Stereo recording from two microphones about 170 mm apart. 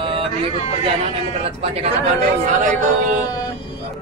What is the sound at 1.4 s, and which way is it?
Speech, 35° right (ahead or behind).